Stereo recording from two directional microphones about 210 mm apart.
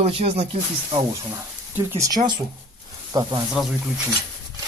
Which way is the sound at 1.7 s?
10° right (ahead or behind).